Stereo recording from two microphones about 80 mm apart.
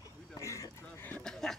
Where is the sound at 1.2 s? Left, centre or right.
Centre.